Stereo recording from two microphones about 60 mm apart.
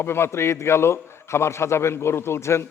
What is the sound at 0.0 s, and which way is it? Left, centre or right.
A man's voice, left.